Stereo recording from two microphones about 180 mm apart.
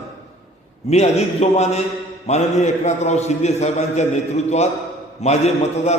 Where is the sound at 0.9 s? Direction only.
35° left (ahead or behind).